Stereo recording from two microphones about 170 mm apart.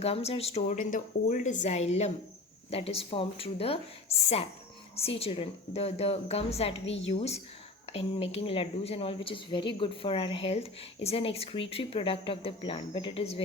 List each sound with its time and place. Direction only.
0.0 s speech: 35° left (ahead or behind)
4.9 s speech: 35° left (ahead or behind)